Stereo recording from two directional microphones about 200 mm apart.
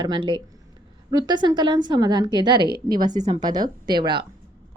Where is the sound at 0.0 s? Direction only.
25° right (ahead or behind).